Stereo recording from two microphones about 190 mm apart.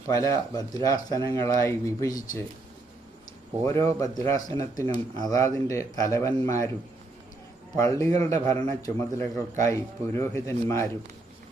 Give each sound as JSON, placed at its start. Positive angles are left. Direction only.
{"t": 0.1, "sound": "speech", "side_deg": 20}
{"t": 3.6, "sound": "speech", "side_deg": 15}
{"t": 7.8, "sound": "speech", "side_deg": 15}